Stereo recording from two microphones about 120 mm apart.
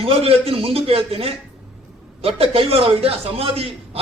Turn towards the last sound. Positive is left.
turn(degrees=-55)  # may be behind; listen again after turning